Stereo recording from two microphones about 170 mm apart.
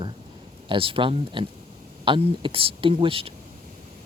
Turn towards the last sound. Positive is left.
turn(degrees=-30)  # may be behind; listen again after turning